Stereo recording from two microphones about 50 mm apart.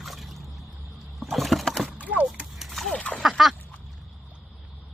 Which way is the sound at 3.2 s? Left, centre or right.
Centre.